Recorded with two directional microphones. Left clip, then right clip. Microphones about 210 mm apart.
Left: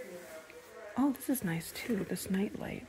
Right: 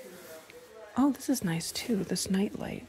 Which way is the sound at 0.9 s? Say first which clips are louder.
Right 4 dB; 20° right (ahead or behind).